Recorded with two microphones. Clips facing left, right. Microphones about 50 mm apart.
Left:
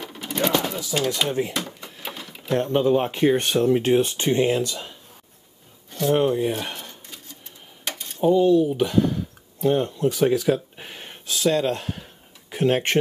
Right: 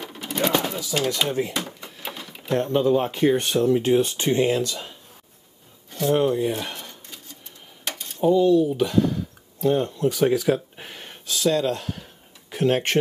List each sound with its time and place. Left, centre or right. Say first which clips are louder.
0.0 s a sound: even; centre
0.7 s speech: even; centre
1.5 s a sound: even; centre
2.7 s speech: even; centre
3.6 s speech: even; left
4.3 s speech: even; centre
6.1 s speech: even; centre
8.2 s speech: even; centre
11.2 s speech: even; left
12.0 s a sound: left 1 dB; centre